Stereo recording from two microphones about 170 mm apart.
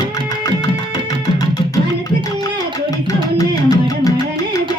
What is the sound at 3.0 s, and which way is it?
Music, 20° left (ahead or behind).